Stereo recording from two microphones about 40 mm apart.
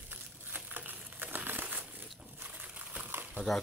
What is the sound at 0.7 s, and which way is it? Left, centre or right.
Crumpling, right.